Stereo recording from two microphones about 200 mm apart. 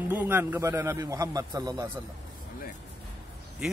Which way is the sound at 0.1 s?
10° right (ahead or behind).